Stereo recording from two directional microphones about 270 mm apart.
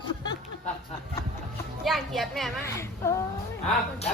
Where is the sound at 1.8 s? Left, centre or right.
Centre.